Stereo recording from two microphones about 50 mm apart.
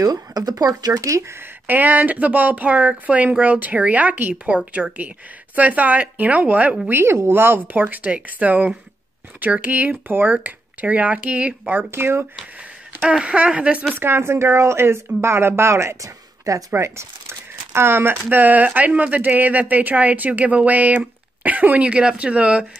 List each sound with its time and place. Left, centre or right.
1.0 s speech: right
1.4 s speech: right
6.9 s speech: right
7.6 s speech: right
11.9 s speech: right
13.0 s speech: centre
13.9 s speech: right